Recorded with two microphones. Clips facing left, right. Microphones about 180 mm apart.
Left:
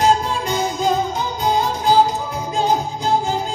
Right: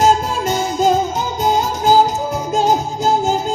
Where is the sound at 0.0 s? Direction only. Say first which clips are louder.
Right 2 dB; 45° right (ahead or behind).